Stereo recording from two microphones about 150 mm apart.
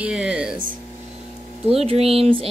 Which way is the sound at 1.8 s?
40° right (ahead or behind).